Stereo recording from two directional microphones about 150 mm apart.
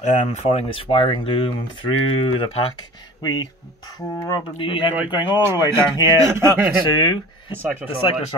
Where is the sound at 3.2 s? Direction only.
25° left (ahead or behind).